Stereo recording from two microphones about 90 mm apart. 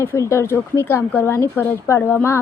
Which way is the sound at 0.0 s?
30° left (ahead or behind).